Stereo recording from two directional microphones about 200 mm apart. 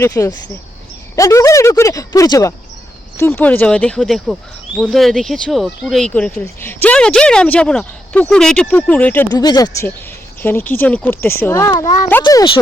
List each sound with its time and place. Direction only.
0.0 s speech: 15° left (ahead or behind)
9.3 s speech: 20° left (ahead or behind)